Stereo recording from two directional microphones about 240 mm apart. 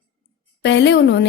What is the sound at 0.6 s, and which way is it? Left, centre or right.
Speech, left.